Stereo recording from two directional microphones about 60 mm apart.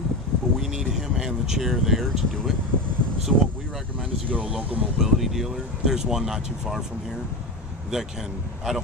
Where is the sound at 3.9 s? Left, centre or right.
Right.